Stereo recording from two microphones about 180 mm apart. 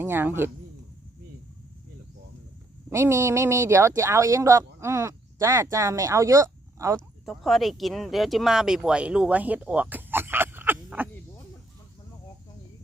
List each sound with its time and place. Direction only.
0.0 s speech: 10° right (ahead or behind)
2.9 s speech: 15° right (ahead or behind)
7.3 s speech: centre (ahead or behind)